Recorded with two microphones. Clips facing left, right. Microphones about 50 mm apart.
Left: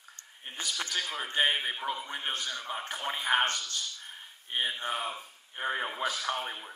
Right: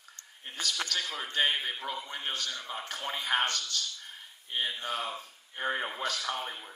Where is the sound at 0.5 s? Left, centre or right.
Left.